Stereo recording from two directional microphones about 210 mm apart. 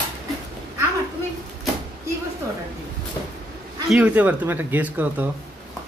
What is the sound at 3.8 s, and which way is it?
Speech, 5° right (ahead or behind).